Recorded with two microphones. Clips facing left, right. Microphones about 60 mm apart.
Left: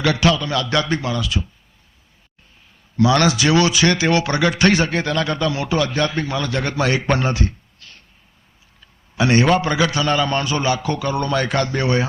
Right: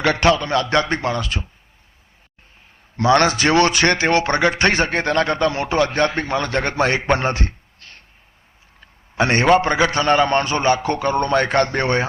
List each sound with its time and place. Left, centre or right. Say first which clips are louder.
0.0 s a man's voice: right 1 dB; right
3.0 s a man's voice: right 1 dB; right
7.2 s a sound: even; right
9.6 s a man's voice: right 2 dB; right